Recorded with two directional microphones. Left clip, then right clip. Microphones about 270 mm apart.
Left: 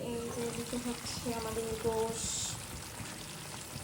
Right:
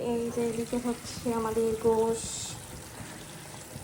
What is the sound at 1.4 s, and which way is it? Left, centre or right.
Speech, centre.